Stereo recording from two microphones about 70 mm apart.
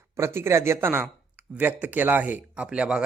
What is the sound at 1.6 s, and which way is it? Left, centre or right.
Speech, right.